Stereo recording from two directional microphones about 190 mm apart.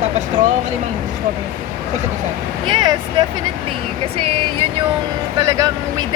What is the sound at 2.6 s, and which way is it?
Speech, 25° right (ahead or behind).